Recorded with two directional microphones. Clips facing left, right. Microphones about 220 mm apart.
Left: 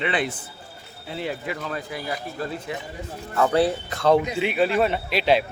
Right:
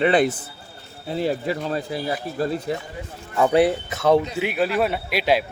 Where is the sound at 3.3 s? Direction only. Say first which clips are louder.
Right 3 dB; 15° right (ahead or behind).